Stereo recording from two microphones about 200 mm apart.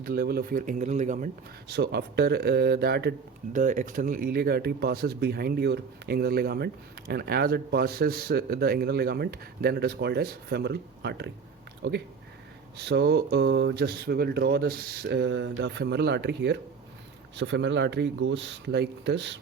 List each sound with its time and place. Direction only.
0.0 s speech: 50° right (ahead or behind)
3.5 s speech: 40° right (ahead or behind); by 19.4 s 60° right (ahead or behind)